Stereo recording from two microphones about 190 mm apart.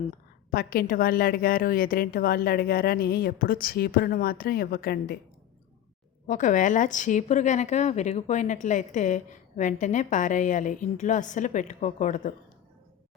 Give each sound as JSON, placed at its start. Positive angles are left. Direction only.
{"t": 0.5, "sound": "a woman's voice", "side_deg": 50}
{"t": 6.2, "sound": "a woman's voice", "side_deg": 40}